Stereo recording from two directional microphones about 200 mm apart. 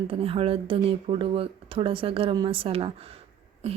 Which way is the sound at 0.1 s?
25° right (ahead or behind).